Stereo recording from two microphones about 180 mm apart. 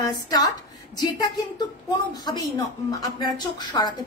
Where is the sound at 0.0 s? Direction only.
20° left (ahead or behind).